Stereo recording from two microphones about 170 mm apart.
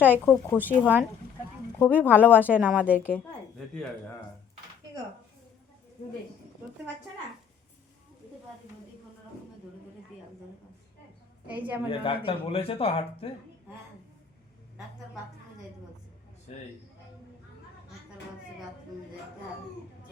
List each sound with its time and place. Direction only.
0.3 s speech: 10° left (ahead or behind)
0.6 s a woman's voice: 10° right (ahead or behind)
11.5 s a woman's voice: 10° right (ahead or behind)
11.9 s speech: 30° left (ahead or behind)